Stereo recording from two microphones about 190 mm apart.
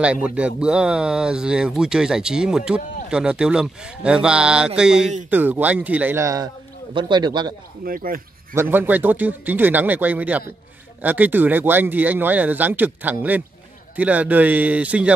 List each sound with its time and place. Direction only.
0.0 s speech: 5° right (ahead or behind); by 7.5 s 25° right (ahead or behind)
7.8 s speech: 50° right (ahead or behind)
8.5 s speech: 10° right (ahead or behind)